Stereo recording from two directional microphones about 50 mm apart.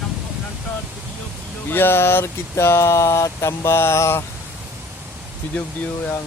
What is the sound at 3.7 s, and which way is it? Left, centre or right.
Speech, left.